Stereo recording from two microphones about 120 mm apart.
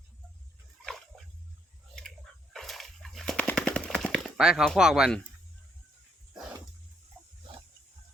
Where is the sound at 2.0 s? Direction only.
5° left (ahead or behind).